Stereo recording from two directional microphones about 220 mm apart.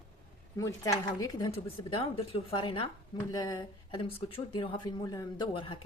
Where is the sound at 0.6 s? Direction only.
15° left (ahead or behind).